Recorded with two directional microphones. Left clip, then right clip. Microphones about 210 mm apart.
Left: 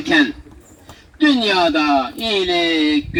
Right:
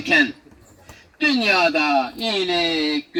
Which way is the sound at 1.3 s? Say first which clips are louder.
Left 1 dB; 15° right (ahead or behind).